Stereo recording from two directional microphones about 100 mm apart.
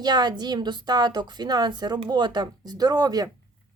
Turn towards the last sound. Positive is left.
turn(degrees=-40)  # may be behind; listen again after turning